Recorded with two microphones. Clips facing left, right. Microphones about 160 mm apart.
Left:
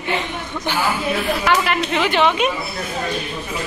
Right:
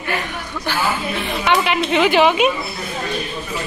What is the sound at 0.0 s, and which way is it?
Speech, 20° left (ahead or behind).